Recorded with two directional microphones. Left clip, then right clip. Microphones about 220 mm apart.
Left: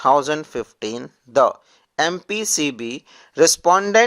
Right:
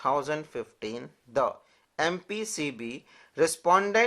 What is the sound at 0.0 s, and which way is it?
Speech, 40° left (ahead or behind).